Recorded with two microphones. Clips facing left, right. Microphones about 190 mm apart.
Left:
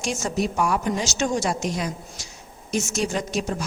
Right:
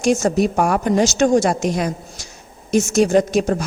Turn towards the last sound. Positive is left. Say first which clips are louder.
# right 10 dB
turn(degrees=-55)  # may be behind; listen again after turning